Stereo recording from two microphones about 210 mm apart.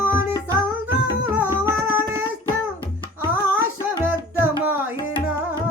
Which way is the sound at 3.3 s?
10° right (ahead or behind).